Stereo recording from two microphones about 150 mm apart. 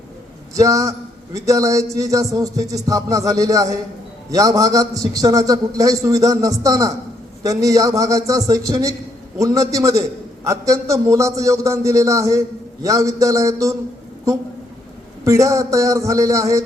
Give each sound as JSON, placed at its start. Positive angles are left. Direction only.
{"t": 0.5, "sound": "a man's voice", "side_deg": -20}
{"t": 15.2, "sound": "a man's voice", "side_deg": -20}